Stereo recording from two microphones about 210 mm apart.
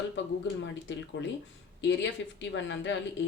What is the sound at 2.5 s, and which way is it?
Speech, 60° left (ahead or behind).